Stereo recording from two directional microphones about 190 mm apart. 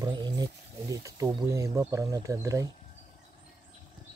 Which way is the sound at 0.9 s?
15° right (ahead or behind).